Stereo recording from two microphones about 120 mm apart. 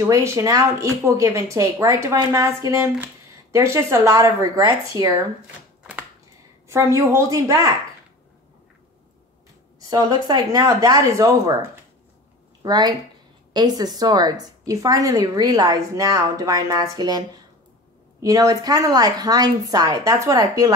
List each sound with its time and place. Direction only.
0.0 s a woman's voice: 25° right (ahead or behind)
6.7 s a woman's voice: 25° right (ahead or behind)
9.8 s a woman's voice: 30° right (ahead or behind)
18.2 s a woman's voice: 30° right (ahead or behind)